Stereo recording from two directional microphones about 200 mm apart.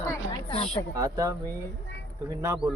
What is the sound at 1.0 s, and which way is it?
Speech, 15° right (ahead or behind).